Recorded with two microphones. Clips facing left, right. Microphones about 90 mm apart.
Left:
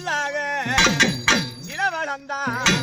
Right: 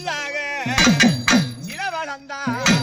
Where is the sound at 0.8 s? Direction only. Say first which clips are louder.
Right 5 dB; 5° right (ahead or behind).